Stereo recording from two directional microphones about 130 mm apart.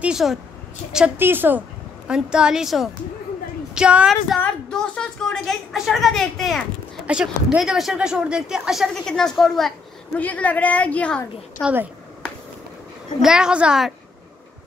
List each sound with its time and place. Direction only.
0.0 s a woman's voice: 5° right (ahead or behind)
11.6 s a woman's voice: 15° right (ahead or behind)
13.2 s speech: 5° right (ahead or behind)